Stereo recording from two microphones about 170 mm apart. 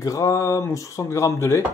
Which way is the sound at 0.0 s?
20° left (ahead or behind).